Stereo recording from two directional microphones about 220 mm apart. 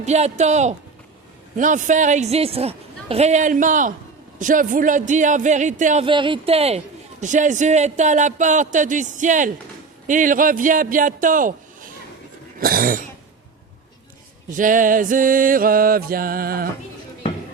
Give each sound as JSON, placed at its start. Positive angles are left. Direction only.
{"t": 0.0, "sound": "a man's voice", "side_deg": -30}
{"t": 12.5, "sound": "cough", "side_deg": -40}
{"t": 14.5, "sound": "a man's voice", "side_deg": -35}